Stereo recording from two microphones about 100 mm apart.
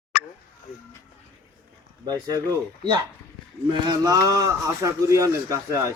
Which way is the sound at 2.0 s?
40° right (ahead or behind).